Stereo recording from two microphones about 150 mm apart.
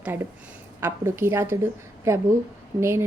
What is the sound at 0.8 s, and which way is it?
A woman's voice, 15° right (ahead or behind).